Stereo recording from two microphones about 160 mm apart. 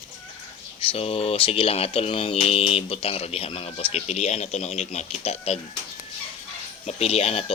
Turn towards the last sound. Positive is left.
turn(degrees=40)  # may be behind; listen again after turning